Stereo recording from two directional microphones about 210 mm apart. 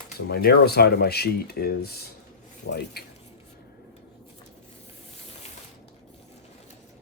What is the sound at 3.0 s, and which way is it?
Speech, 50° left (ahead or behind).